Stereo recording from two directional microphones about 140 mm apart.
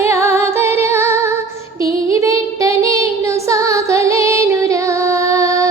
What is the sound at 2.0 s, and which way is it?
Child singing, 20° right (ahead or behind).